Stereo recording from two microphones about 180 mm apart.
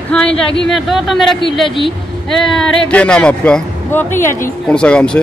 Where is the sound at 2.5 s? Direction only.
5° left (ahead or behind).